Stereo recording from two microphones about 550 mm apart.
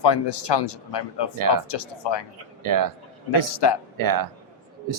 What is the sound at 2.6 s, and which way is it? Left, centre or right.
Speech, right.